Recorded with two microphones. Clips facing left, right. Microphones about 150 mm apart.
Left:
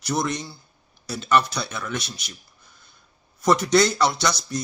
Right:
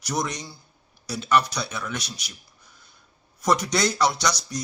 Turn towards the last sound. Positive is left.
turn(degrees=-10)  # may be behind; listen again after turning